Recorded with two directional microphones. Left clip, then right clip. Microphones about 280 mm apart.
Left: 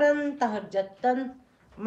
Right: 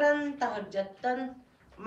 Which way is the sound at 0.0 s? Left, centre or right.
Left.